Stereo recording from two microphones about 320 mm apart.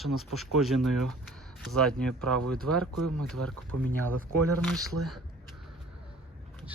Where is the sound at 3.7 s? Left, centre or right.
Right.